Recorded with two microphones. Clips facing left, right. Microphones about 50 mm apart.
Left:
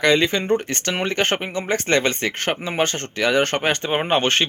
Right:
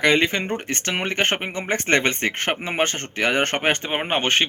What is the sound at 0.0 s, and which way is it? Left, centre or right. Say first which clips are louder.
Speech: left 1 dB; right.